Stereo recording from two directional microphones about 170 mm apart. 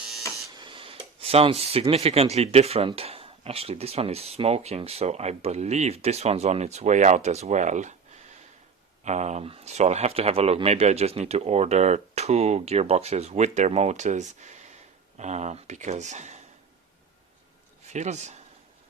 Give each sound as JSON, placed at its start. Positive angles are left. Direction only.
{"t": 0.5, "sound": "speech", "side_deg": -30}
{"t": 17.9, "sound": "speech", "side_deg": -45}